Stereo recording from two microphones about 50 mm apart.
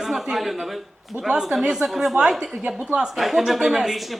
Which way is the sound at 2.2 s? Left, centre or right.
Centre.